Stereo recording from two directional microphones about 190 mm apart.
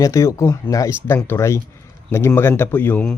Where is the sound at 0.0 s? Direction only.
15° left (ahead or behind).